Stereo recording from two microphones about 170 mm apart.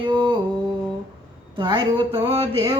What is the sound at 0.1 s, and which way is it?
Music, 30° right (ahead or behind).